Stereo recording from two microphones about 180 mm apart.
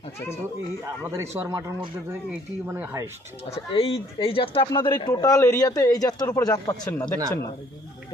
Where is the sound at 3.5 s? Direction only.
30° left (ahead or behind).